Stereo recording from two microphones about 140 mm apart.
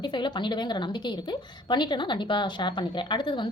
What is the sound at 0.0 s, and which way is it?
Speech, 30° left (ahead or behind).